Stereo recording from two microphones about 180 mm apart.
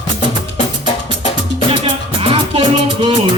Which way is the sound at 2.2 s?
30° right (ahead or behind).